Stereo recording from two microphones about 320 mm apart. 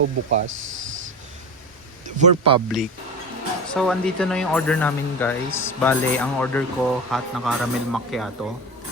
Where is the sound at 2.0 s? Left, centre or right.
Centre.